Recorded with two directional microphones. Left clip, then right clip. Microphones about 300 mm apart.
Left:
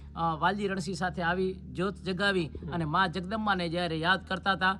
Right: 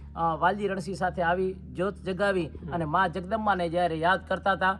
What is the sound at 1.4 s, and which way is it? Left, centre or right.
Speech, centre.